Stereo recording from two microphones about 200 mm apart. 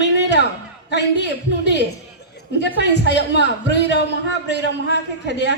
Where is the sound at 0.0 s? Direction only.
60° left (ahead or behind).